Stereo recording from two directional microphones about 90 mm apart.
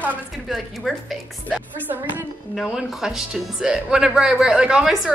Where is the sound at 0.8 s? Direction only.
5° right (ahead or behind).